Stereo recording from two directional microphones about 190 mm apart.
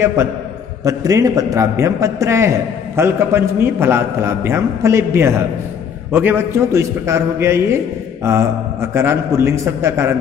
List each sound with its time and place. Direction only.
0.0 s a man's voice: 15° right (ahead or behind)